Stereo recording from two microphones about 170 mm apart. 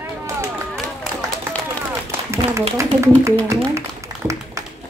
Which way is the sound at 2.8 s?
15° right (ahead or behind).